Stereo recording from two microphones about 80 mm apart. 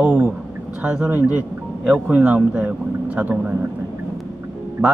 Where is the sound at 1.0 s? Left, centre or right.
Right.